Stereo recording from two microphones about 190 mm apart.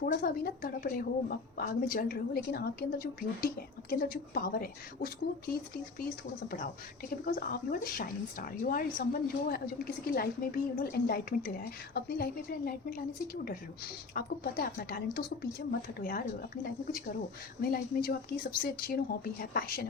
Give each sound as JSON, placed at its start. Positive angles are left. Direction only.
{"t": 0.0, "sound": "a woman's voice", "side_deg": 50}
{"t": 7.3, "sound": "a woman's voice", "side_deg": 50}
{"t": 17.6, "sound": "a woman's voice", "side_deg": 50}